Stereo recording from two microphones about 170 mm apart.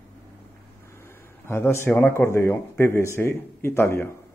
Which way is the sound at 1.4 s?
15° left (ahead or behind).